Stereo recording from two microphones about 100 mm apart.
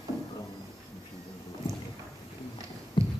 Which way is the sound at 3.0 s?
55° left (ahead or behind).